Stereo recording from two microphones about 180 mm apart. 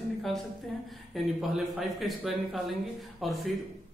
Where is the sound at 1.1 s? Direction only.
Centre (ahead or behind).